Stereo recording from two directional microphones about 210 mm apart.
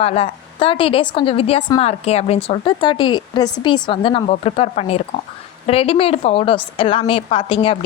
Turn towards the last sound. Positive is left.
turn(degrees=25)  # may be behind; listen again after turning